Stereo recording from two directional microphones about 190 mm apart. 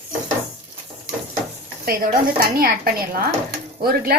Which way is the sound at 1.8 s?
50° right (ahead or behind).